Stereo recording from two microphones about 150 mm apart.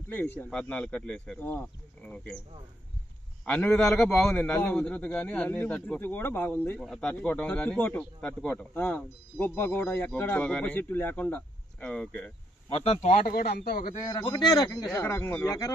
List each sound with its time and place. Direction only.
0.1 s a man's voice: 15° left (ahead or behind)
3.4 s a man's voice: 10° left (ahead or behind)
6.7 s speech: centre (ahead or behind)
7.1 s a man's voice: 10° left (ahead or behind)
12.6 s speech: 40° left (ahead or behind)
13.3 s speech: 90° left
14.0 s speech: 30° left (ahead or behind)
14.9 s a man's voice: 15° left (ahead or behind)
15.4 s speech: 25° left (ahead or behind)